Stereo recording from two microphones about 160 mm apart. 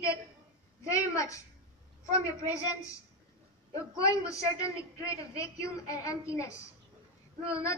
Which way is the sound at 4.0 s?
20° left (ahead or behind).